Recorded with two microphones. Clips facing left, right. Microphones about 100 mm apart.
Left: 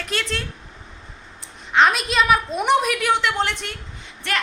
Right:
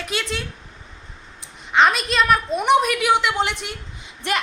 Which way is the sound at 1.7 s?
Centre (ahead or behind).